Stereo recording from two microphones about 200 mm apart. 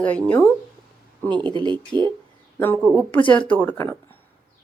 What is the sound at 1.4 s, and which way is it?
Speech, 25° right (ahead or behind).